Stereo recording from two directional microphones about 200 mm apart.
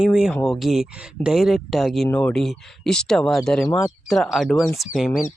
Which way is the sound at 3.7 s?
15° left (ahead or behind).